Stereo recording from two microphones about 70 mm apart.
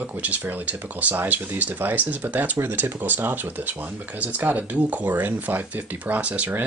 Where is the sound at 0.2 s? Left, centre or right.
Right.